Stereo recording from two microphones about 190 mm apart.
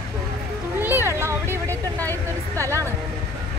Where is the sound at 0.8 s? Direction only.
10° right (ahead or behind).